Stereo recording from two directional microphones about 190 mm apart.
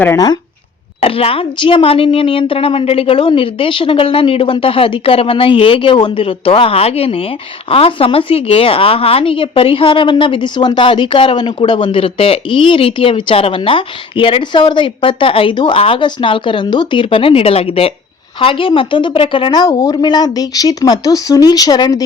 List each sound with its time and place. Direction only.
0.0 s speech: 15° left (ahead or behind)
1.0 s a woman's voice: 30° left (ahead or behind)